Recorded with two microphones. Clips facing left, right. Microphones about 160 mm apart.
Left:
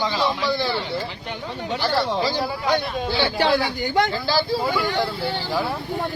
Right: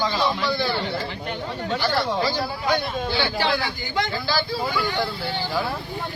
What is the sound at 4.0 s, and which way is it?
Speech, 35° left (ahead or behind).